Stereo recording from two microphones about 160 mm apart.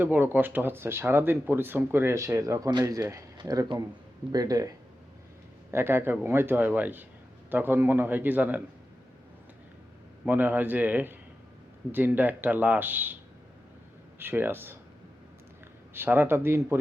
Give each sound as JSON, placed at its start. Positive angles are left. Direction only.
{"t": 0.0, "sound": "speech", "side_deg": -10}
{"t": 5.7, "sound": "speech", "side_deg": -15}
{"t": 10.2, "sound": "speech", "side_deg": -10}
{"t": 14.2, "sound": "speech", "side_deg": -15}
{"t": 16.0, "sound": "speech", "side_deg": -15}